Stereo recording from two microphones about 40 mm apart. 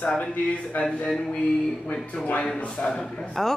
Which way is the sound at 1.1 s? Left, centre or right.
Left.